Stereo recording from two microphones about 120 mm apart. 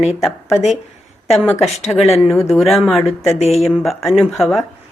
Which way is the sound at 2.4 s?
Centre (ahead or behind).